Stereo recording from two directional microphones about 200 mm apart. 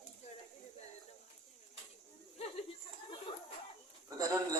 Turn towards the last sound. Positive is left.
turn(degrees=-15)  # may be behind; listen again after turning